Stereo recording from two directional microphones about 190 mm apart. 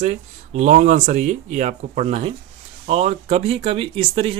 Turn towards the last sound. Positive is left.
turn(degrees=-30)  # may be behind; listen again after turning